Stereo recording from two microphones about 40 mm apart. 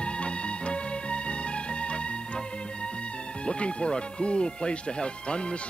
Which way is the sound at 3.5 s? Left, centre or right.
Left.